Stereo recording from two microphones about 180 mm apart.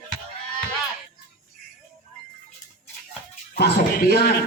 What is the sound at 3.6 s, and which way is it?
Speech, 60° left (ahead or behind).